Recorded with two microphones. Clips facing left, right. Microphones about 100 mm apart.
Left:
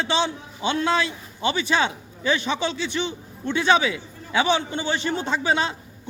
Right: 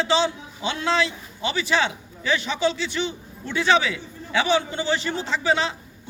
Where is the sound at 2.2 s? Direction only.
20° left (ahead or behind).